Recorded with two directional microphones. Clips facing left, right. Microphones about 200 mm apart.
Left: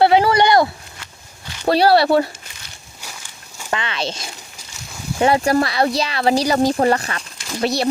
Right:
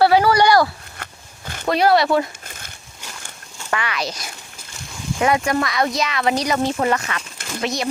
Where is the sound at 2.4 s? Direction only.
50° right (ahead or behind).